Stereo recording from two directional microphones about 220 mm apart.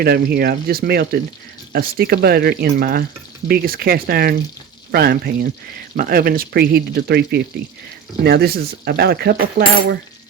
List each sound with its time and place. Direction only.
0.0 s speech: 45° right (ahead or behind)